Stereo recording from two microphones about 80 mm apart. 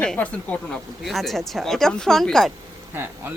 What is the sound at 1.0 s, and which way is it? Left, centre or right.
Speech, centre.